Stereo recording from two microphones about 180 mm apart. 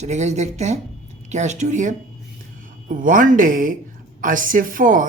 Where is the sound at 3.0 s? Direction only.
50° right (ahead or behind).